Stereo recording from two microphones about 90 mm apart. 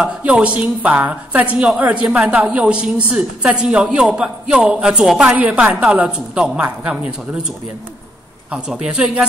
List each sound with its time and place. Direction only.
0.0 s a woman's voice: 15° right (ahead or behind)